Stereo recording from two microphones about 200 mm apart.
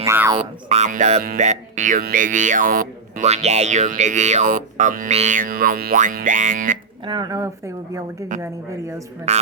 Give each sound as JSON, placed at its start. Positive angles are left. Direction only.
{"t": 0.0, "sound": "speech", "side_deg": -15}
{"t": 0.7, "sound": "speech", "side_deg": -35}
{"t": 7.0, "sound": "speech", "side_deg": -20}